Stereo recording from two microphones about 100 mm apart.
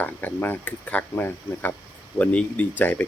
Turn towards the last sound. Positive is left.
turn(degrees=15)  # may be behind; listen again after turning